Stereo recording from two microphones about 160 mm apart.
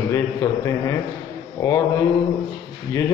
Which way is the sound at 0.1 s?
20° left (ahead or behind).